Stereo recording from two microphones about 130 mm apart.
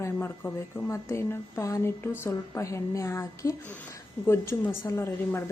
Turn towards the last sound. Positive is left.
turn(degrees=20)  # may be behind; listen again after turning